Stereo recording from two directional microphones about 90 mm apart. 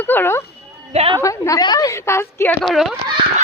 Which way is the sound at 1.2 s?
35° left (ahead or behind).